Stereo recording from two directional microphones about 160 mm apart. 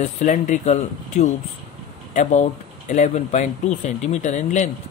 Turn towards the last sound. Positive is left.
turn(degrees=45)  # may be behind; listen again after turning